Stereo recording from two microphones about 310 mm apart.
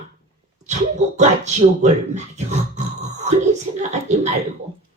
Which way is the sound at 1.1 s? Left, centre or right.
Right.